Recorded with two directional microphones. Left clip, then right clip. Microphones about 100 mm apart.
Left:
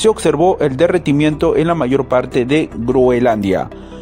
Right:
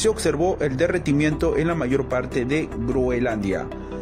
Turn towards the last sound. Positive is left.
turn(degrees=65)  # may be behind; listen again after turning